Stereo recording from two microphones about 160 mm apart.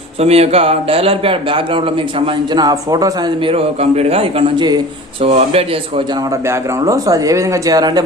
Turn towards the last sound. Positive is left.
turn(degrees=-25)  # may be behind; listen again after turning